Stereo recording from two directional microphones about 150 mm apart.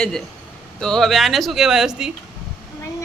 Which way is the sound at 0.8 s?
5° left (ahead or behind).